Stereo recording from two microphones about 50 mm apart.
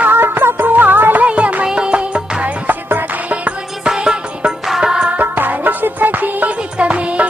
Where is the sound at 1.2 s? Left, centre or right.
Right.